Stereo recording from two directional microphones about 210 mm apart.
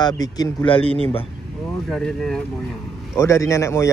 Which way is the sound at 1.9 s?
Centre (ahead or behind).